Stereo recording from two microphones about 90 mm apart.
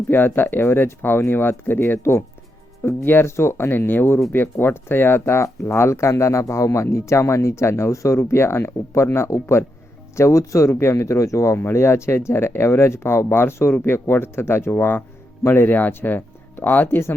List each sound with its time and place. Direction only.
0.1 s speech: 25° left (ahead or behind)